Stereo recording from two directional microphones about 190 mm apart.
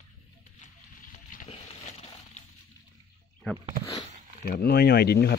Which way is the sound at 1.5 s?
35° left (ahead or behind).